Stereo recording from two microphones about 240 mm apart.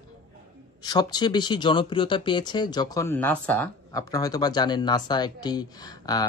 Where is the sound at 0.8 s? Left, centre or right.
Centre.